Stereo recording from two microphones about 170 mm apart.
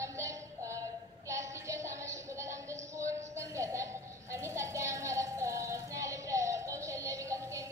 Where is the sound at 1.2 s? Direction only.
15° right (ahead or behind).